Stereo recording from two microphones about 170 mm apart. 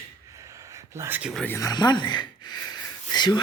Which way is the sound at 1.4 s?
15° left (ahead or behind).